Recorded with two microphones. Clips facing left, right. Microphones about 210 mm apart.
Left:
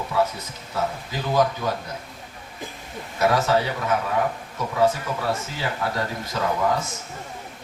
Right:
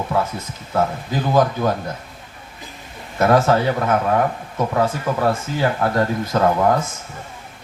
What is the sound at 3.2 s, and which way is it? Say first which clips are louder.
Speech: right 5 dB; 55° right (ahead or behind).